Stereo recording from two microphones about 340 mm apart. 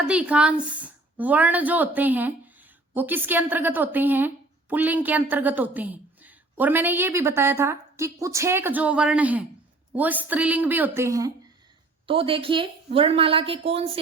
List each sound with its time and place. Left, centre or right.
0.0 s a woman's voice: centre